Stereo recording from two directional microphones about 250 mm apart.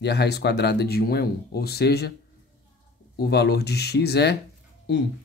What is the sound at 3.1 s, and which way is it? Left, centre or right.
Speech, left.